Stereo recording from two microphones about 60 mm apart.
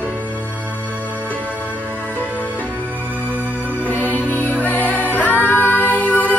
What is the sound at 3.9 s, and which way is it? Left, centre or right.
Music, left.